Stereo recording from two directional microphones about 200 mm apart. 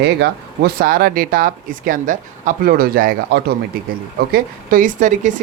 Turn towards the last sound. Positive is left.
turn(degrees=-40)  # may be behind; listen again after turning